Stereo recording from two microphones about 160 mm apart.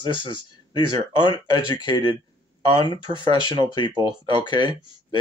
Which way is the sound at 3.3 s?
30° left (ahead or behind).